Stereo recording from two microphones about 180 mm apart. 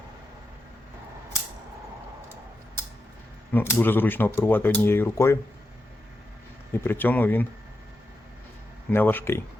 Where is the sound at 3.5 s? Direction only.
10° left (ahead or behind).